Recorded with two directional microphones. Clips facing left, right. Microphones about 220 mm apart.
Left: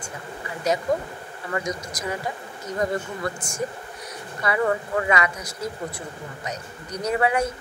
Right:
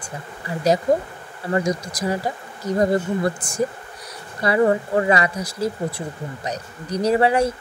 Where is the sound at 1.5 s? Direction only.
30° right (ahead or behind).